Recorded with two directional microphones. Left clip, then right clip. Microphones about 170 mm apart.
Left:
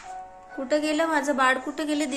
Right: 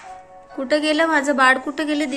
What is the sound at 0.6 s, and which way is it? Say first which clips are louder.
A woman's voice: right 6 dB; centre (ahead or behind).